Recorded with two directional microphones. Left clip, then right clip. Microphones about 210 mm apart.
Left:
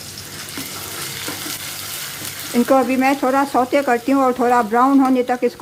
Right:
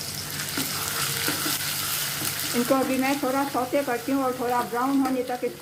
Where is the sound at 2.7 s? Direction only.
40° left (ahead or behind).